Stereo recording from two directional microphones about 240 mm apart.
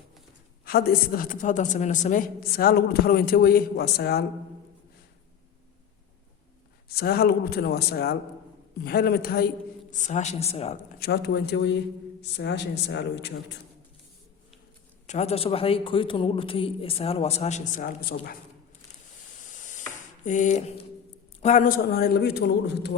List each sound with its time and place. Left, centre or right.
0.6 s a woman's voice: left
6.8 s a woman's voice: left
11.0 s a man's voice: left
15.0 s a man's voice: left
19.5 s spray: left
20.2 s a woman's voice: left